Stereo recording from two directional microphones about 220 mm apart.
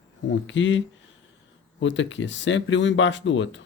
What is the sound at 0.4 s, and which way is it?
Speech, 60° left (ahead or behind).